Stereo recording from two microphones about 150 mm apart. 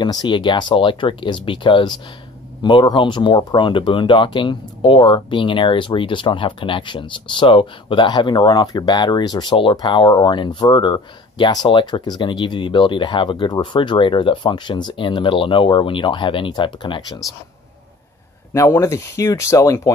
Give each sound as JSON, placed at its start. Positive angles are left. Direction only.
{"t": 0.0, "sound": "speech", "side_deg": 30}
{"t": 18.5, "sound": "speech", "side_deg": 20}